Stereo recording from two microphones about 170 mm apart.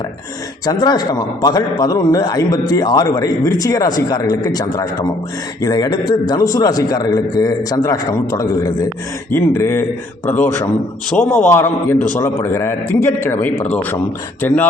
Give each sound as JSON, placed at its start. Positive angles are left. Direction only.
{"t": 0.6, "sound": "a man's voice", "side_deg": 25}